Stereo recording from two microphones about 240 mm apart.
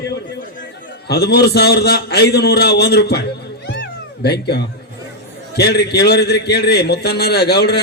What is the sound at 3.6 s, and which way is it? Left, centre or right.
Cat, left.